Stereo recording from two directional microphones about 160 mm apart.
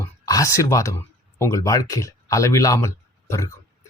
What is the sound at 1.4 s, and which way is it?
Speech, 20° left (ahead or behind).